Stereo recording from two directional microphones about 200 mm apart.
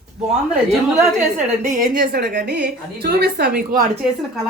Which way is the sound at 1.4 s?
35° right (ahead or behind).